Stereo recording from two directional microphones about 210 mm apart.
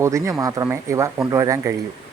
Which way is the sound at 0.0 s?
15° right (ahead or behind).